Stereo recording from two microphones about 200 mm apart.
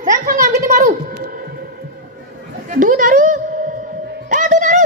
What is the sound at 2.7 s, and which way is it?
Speech, 40° right (ahead or behind).